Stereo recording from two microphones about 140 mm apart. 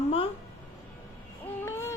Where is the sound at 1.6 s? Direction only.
15° left (ahead or behind).